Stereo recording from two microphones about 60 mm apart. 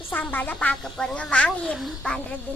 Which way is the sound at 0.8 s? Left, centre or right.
Centre.